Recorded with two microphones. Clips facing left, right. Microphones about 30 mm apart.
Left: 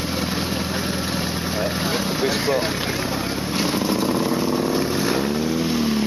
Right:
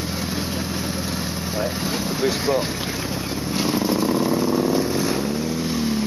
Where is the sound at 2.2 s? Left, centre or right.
Centre.